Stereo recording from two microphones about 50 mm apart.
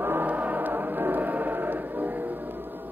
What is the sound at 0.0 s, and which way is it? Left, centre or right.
Music, right.